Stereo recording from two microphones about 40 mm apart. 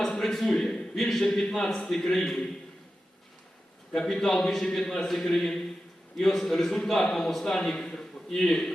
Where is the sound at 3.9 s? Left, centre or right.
Centre.